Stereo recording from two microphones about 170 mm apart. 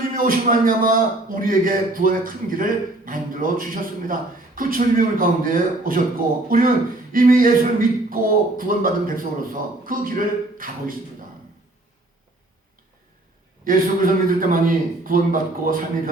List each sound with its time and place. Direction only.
0.1 s a man's voice: 55° right (ahead or behind)
13.7 s a man's voice: 55° right (ahead or behind)